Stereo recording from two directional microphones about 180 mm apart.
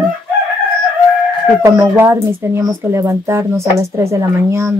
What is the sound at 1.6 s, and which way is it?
Speech, 15° right (ahead or behind).